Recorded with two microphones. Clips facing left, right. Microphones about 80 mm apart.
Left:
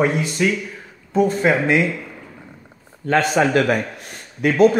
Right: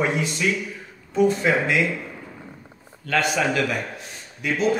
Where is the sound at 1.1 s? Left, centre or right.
Left.